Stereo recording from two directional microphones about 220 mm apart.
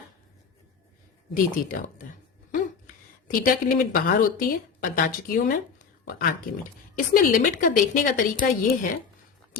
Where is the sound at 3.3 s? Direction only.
40° left (ahead or behind).